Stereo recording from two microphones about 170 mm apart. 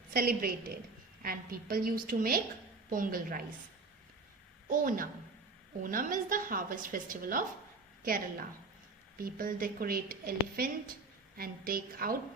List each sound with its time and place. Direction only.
0.1 s a woman's voice: 60° right (ahead or behind)
4.7 s a woman's voice: 55° right (ahead or behind)